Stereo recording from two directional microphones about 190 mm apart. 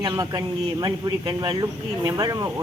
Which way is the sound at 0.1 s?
20° right (ahead or behind).